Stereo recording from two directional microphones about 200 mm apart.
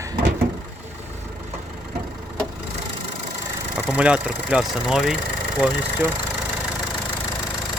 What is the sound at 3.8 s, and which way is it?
Speech, 5° right (ahead or behind).